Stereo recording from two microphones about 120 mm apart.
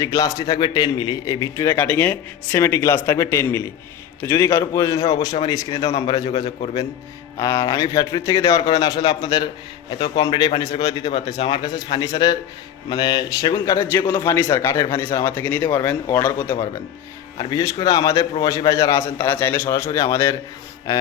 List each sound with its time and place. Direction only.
0.0 s a man's voice: 30° left (ahead or behind)
1.7 s speech: 15° left (ahead or behind)
2.6 s a man's voice: 25° left (ahead or behind)
7.3 s a man's voice: 25° left (ahead or behind)
10.6 s a man's voice: 35° left (ahead or behind)
13.7 s a man's voice: 15° left (ahead or behind)
17.3 s a man's voice: 30° left (ahead or behind)